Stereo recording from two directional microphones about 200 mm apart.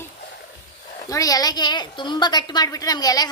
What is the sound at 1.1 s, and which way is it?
A woman's voice, 15° left (ahead or behind).